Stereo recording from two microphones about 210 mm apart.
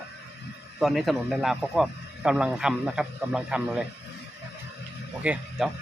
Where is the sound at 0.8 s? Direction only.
Centre (ahead or behind).